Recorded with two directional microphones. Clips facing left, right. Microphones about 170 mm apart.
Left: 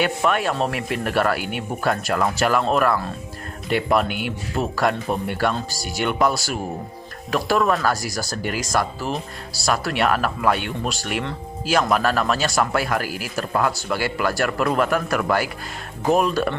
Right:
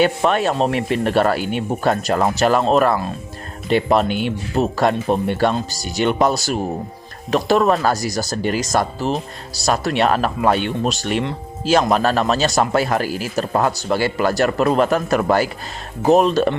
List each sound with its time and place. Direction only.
0.0 s speech: 30° right (ahead or behind)